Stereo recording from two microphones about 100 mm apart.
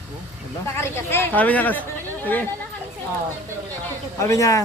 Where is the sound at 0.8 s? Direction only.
25° left (ahead or behind).